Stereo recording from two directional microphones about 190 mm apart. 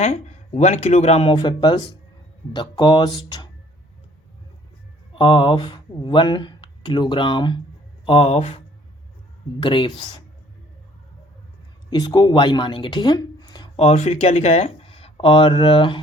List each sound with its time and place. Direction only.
0.0 s speech: 35° left (ahead or behind); by 3.5 s 20° left (ahead or behind)
5.1 s speech: 25° left (ahead or behind)
11.9 s speech: 20° left (ahead or behind)